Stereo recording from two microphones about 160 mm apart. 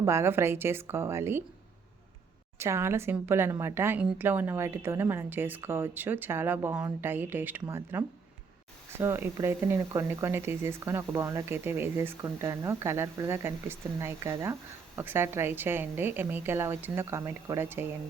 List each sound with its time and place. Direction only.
0.0 s speech: 15° right (ahead or behind)
2.6 s speech: 15° right (ahead or behind)